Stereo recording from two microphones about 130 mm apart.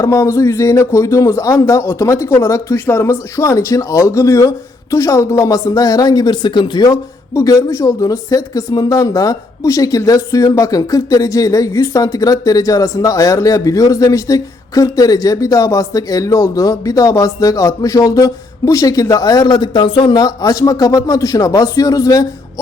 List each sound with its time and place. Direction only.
0.0 s a man's voice: 20° left (ahead or behind)